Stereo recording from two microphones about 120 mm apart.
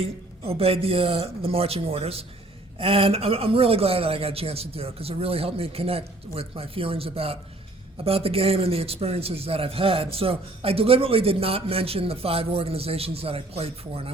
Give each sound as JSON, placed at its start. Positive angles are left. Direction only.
{"t": 0.0, "sound": "a man's voice", "side_deg": -55}